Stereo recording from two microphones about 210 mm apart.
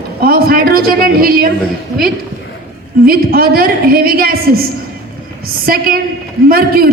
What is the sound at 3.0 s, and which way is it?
A man's voice, 45° right (ahead or behind).